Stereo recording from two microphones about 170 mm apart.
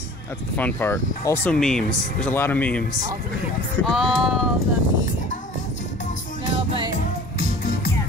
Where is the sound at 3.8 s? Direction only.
Centre (ahead or behind).